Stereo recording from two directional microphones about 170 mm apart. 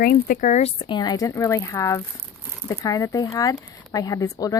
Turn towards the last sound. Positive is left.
turn(degrees=20)  # may be behind; listen again after turning